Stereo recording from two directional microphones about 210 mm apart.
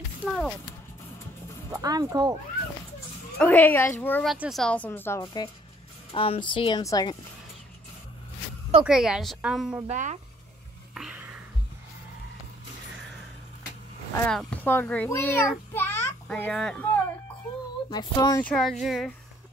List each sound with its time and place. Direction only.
0.2 s clip-clop: 5° right (ahead or behind)
1.7 s speech: 15° right (ahead or behind)
3.3 s a woman's voice: 10° left (ahead or behind)
5.2 s speech: 20° left (ahead or behind)
8.8 s a woman's voice: 5° right (ahead or behind)
9.8 s speech: 35° right (ahead or behind)
11.0 s a sound: 5° right (ahead or behind)
14.1 s a child's voice: 5° left (ahead or behind)
17.8 s speech: 20° left (ahead or behind)
18.4 s a woman's voice: 5° left (ahead or behind)